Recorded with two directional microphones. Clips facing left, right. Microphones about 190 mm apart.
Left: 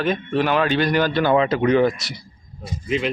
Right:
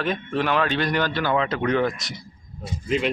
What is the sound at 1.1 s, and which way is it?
Speech, 20° left (ahead or behind).